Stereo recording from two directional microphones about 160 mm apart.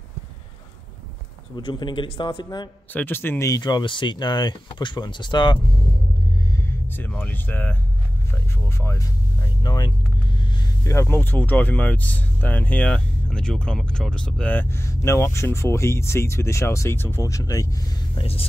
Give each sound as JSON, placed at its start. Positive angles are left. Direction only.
{"t": 1.6, "sound": "speech", "side_deg": 30}
{"t": 2.9, "sound": "speech", "side_deg": 10}
{"t": 6.5, "sound": "speech", "side_deg": 10}
{"t": 18.1, "sound": "speech", "side_deg": 35}